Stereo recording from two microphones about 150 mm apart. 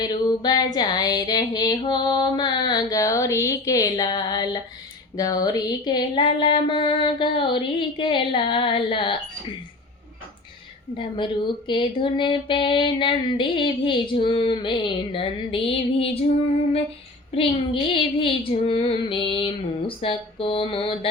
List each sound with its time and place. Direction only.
0.0 s a sound: 25° left (ahead or behind)
5.1 s speech: 25° left (ahead or behind)
10.9 s speech: 35° left (ahead or behind)
17.3 s speech: 40° left (ahead or behind)